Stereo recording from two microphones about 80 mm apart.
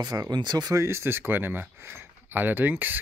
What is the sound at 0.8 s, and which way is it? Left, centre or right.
Speech, right.